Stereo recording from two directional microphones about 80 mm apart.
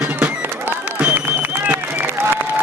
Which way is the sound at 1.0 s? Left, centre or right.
Right.